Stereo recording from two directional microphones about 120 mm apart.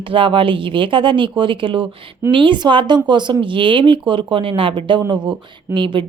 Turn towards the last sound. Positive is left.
turn(degrees=-45)  # may be behind; listen again after turning